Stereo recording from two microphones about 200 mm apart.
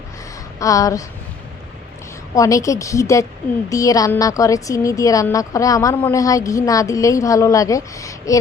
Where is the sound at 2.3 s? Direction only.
15° left (ahead or behind).